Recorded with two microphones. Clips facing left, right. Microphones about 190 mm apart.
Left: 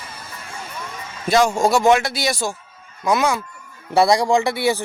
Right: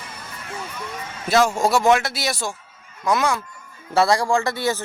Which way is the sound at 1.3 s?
5° right (ahead or behind).